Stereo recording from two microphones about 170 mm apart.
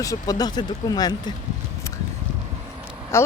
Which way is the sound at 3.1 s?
15° left (ahead or behind).